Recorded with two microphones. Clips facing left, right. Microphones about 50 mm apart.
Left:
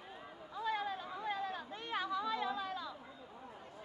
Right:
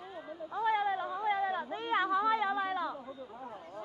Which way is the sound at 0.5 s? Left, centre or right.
Right.